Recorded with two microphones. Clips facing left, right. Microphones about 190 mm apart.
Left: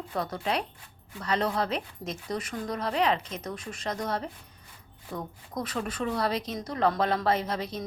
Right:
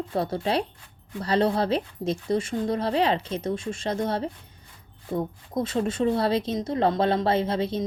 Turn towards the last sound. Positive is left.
turn(degrees=-25)  # may be behind; listen again after turning